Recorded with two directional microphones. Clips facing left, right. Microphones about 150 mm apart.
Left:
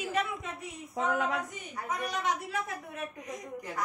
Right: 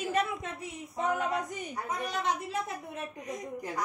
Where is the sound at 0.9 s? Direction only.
90° left.